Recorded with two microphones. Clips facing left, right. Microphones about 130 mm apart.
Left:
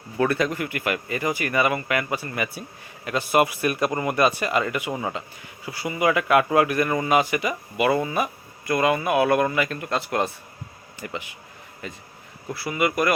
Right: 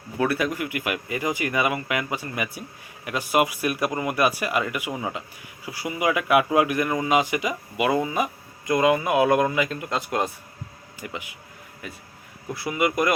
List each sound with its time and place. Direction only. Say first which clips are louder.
0.2 s speech: left 1 dB; 10° right (ahead or behind)
12.5 s speech: even; 20° right (ahead or behind)